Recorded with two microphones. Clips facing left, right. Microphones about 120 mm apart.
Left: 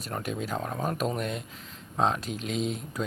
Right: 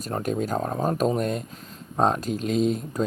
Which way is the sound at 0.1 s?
45° right (ahead or behind).